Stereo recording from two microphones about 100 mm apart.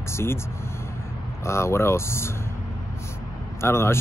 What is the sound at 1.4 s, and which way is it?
Speech, 25° left (ahead or behind).